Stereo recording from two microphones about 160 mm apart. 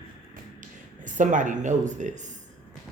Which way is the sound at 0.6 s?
50° right (ahead or behind).